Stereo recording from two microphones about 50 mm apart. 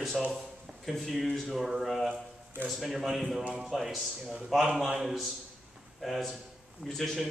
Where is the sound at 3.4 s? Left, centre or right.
Right.